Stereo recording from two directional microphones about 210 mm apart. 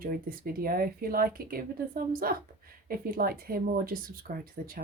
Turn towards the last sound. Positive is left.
turn(degrees=-40)  # may be behind; listen again after turning